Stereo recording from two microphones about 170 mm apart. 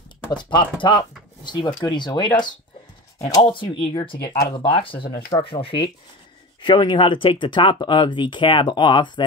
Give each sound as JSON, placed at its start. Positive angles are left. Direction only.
{"t": 0.3, "sound": "speech", "side_deg": 30}